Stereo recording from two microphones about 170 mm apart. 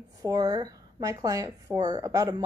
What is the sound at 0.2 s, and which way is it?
A woman's voice, 20° right (ahead or behind).